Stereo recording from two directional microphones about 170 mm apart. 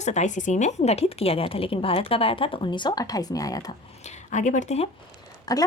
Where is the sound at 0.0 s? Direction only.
45° left (ahead or behind); by 3.7 s 20° left (ahead or behind).